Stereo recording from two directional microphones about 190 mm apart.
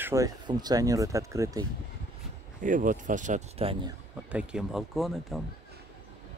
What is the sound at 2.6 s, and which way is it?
Speech, 45° right (ahead or behind).